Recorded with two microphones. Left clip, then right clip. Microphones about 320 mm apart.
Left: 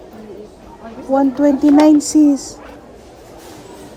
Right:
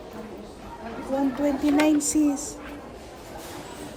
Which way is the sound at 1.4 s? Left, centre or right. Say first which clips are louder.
Left 12 dB; left.